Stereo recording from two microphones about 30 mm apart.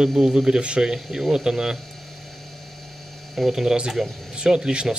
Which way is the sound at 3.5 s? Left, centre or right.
Centre.